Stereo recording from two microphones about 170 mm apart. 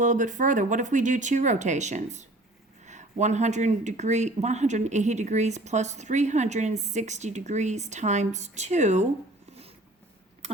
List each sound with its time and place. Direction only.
0.0 s speech: 45° right (ahead or behind)